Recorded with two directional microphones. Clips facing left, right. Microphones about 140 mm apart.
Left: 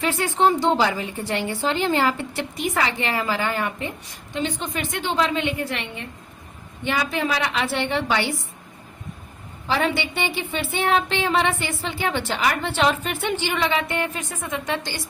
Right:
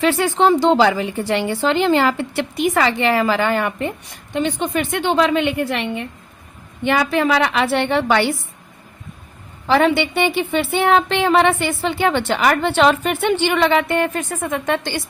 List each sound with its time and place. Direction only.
0.0 s a woman's voice: 80° right; by 8.3 s 60° right (ahead or behind)
9.6 s a woman's voice: 65° right (ahead or behind)